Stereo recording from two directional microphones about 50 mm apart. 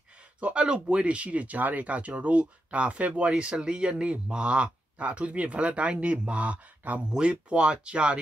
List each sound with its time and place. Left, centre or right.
0.4 s a man's voice: right